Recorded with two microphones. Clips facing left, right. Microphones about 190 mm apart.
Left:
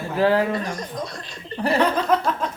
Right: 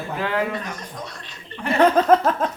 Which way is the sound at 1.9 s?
50° right (ahead or behind).